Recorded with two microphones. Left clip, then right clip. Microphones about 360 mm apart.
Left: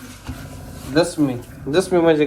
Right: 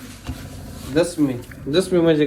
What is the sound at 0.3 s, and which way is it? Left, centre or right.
Speech, centre.